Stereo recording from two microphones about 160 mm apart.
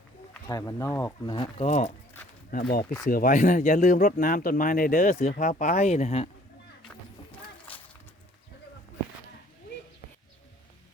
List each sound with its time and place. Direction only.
0.4 s speech: 20° left (ahead or behind)
1.3 s speech: 30° left (ahead or behind)
1.6 s speech: 50° left (ahead or behind)
2.5 s speech: 65° left (ahead or behind); by 6.3 s 40° left (ahead or behind)
6.8 s a sound: 10° left (ahead or behind)